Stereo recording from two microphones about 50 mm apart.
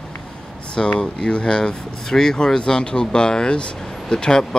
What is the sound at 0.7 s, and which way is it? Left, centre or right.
Speech, centre.